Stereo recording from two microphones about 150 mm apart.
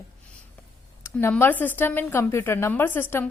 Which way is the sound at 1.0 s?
15° left (ahead or behind).